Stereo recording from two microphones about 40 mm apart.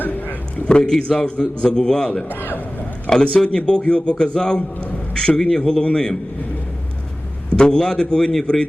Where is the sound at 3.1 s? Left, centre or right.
Centre.